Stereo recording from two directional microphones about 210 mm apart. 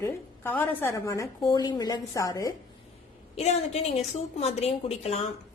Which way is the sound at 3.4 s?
30° left (ahead or behind).